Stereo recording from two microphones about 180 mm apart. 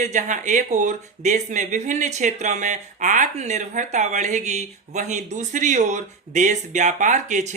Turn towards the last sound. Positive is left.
turn(degrees=-40)  # may be behind; listen again after turning